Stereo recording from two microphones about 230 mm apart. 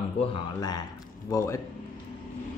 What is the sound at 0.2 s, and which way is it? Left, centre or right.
A man's voice, centre.